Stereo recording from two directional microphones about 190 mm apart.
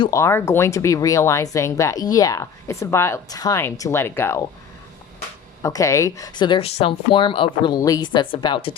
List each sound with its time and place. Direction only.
0.0 s speech: 15° left (ahead or behind)
5.6 s speech: 15° left (ahead or behind)